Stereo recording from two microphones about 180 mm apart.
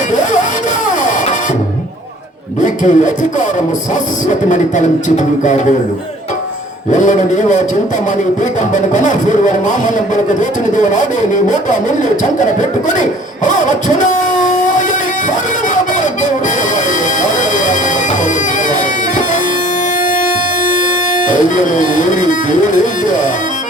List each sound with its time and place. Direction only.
2.6 s a man's voice: 45° left (ahead or behind)
4.3 s a man's voice: 45° left (ahead or behind)
6.9 s a man's voice: 45° left (ahead or behind)
8.7 s a man's voice: 45° left (ahead or behind)
11.4 s a man's voice: 45° left (ahead or behind)
13.0 s a sound: 45° left (ahead or behind)
21.2 s speech: 45° left (ahead or behind)